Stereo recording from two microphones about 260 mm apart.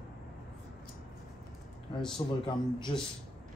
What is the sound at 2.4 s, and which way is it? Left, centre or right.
Speech, centre.